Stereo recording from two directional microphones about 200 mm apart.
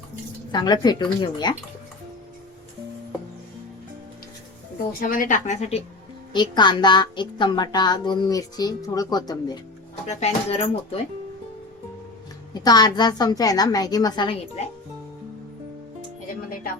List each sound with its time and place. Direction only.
0.5 s a woman's voice: 20° left (ahead or behind)
4.9 s speech: 45° left (ahead or behind)
6.3 s a woman's voice: 20° left (ahead or behind)
10.1 s speech: 35° left (ahead or behind)
12.6 s a woman's voice: 20° left (ahead or behind)